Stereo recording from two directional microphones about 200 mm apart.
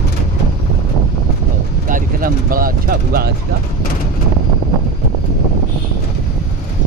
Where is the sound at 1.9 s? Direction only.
45° right (ahead or behind).